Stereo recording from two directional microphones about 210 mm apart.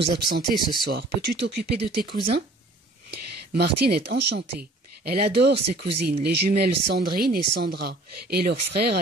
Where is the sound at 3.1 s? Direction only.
50° right (ahead or behind).